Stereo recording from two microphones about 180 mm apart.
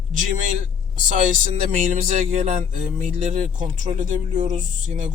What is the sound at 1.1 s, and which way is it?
Speech, 45° right (ahead or behind).